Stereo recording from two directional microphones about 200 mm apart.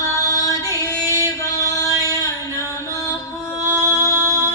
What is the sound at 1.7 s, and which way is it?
Singing, 15° left (ahead or behind).